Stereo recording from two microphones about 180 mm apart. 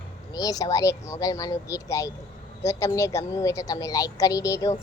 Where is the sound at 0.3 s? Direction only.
20° left (ahead or behind).